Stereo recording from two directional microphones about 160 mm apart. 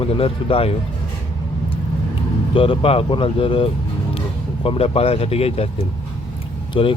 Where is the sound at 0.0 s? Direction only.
35° left (ahead or behind).